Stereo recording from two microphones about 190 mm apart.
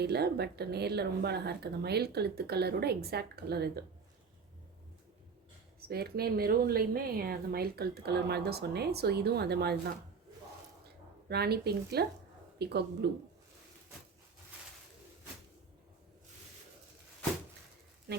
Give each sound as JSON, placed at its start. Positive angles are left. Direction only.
{"t": 0.0, "sound": "a woman's voice", "side_deg": -60}
{"t": 5.9, "sound": "a woman's voice", "side_deg": -55}
{"t": 11.3, "sound": "a woman's voice", "side_deg": -55}
{"t": 18.1, "sound": "speech", "side_deg": -60}